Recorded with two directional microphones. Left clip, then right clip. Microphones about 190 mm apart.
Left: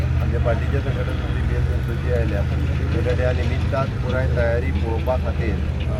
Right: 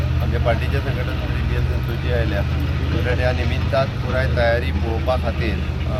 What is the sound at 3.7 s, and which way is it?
Speech, 5° right (ahead or behind).